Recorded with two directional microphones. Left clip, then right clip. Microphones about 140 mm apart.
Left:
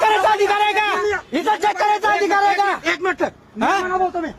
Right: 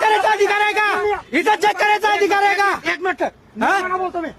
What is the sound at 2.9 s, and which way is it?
Speech, 30° right (ahead or behind).